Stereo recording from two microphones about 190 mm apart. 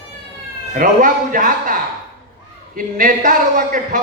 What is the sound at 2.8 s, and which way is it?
A man's voice, 45° right (ahead or behind).